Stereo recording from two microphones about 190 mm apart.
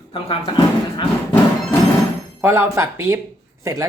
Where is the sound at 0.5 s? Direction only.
15° left (ahead or behind).